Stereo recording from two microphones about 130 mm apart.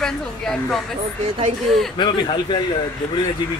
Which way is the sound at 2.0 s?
35° left (ahead or behind).